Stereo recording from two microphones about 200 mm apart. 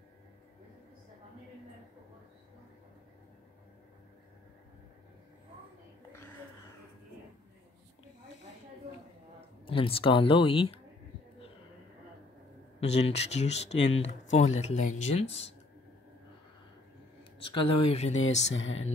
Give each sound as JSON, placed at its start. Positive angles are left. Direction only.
{"t": 9.7, "sound": "speech", "side_deg": 25}
{"t": 12.8, "sound": "speech", "side_deg": 35}
{"t": 17.2, "sound": "speech", "side_deg": 25}
{"t": 18.4, "sound": "music", "side_deg": 70}